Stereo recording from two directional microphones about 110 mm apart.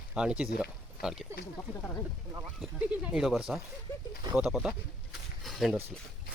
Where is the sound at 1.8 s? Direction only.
20° left (ahead or behind).